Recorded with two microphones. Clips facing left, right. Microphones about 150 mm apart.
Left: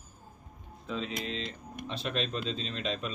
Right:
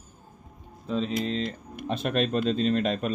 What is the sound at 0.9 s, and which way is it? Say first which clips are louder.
Speech: right 8 dB; 35° right (ahead or behind).